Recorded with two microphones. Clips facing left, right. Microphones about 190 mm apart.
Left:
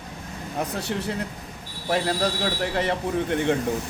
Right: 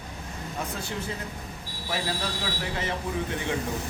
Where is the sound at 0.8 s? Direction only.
70° left (ahead or behind).